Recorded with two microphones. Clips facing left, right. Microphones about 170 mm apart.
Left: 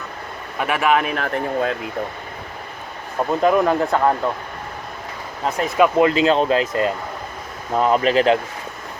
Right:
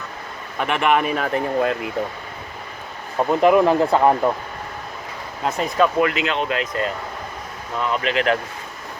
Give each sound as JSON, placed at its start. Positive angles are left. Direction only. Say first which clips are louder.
{"t": 0.6, "sound": "speech", "louder": "even", "side_deg": 5}
{"t": 3.2, "sound": "speech", "louder": "right 2 dB", "side_deg": -5}
{"t": 5.5, "sound": "speech", "louder": "left 2 dB", "side_deg": 0}
{"t": 6.0, "sound": "speech", "louder": "left 5 dB", "side_deg": 30}
{"t": 7.8, "sound": "speech", "louder": "left 6 dB", "side_deg": 40}